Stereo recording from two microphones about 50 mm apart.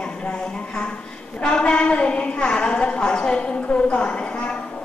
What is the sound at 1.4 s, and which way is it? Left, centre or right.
A woman's voice, centre.